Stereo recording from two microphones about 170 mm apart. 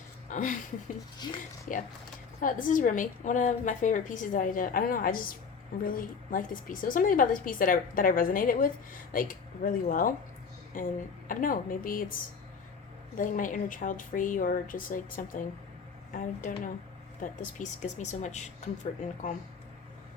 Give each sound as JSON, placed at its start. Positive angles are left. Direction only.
{"t": 0.3, "sound": "speech", "side_deg": 50}
{"t": 1.2, "sound": "speech", "side_deg": 25}
{"t": 1.7, "sound": "a woman's voice", "side_deg": 50}